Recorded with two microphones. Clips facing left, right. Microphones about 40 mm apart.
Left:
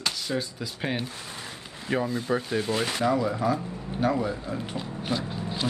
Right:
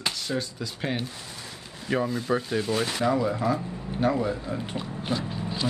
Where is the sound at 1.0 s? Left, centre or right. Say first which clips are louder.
Left 1 dB; left.